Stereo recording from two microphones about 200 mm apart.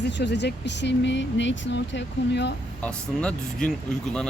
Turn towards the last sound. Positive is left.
turn(degrees=5)  # may be behind; listen again after turning